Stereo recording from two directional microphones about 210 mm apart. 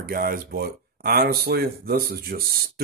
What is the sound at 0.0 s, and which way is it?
Speech, 45° right (ahead or behind).